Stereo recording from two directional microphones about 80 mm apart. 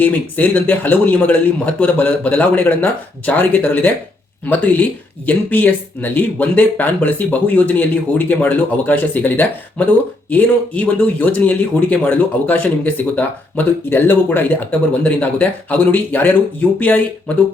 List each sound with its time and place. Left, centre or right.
0.0 s speech: left